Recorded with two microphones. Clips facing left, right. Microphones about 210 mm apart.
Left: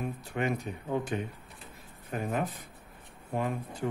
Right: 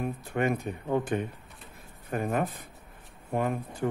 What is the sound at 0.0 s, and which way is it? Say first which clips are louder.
Speech: right 4 dB; 55° right (ahead or behind).